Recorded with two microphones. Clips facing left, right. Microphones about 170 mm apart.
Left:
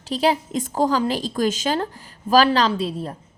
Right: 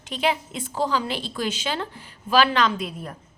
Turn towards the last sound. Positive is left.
turn(degrees=30)  # may be behind; listen again after turning